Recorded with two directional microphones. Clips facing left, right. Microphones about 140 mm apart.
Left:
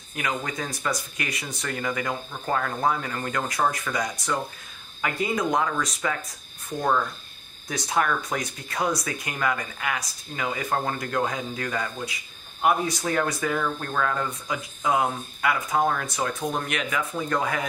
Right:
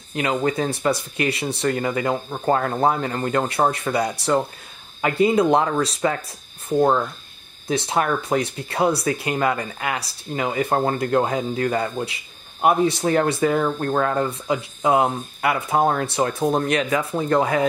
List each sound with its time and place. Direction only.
0.1 s speech: 25° right (ahead or behind)
7.6 s speech: 25° right (ahead or behind)